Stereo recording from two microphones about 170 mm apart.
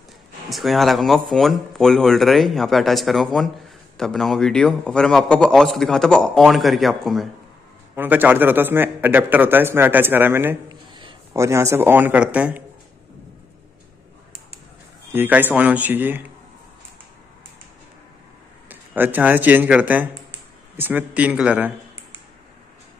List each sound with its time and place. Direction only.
0.5 s a man's voice: centre (ahead or behind)
7.9 s a man's voice: 10° right (ahead or behind)
10.7 s a sound: 30° right (ahead or behind)
11.3 s a man's voice: 15° right (ahead or behind)
15.1 s a man's voice: 10° right (ahead or behind)
18.7 s speech: 10° right (ahead or behind)